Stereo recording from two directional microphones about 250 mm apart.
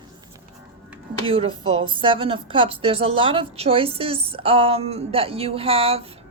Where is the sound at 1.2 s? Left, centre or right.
Right.